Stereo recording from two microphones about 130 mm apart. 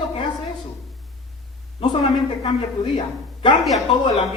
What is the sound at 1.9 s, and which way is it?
Speech, 40° left (ahead or behind).